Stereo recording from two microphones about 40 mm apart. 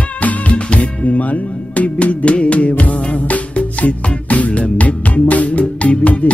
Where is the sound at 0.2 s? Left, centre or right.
Left.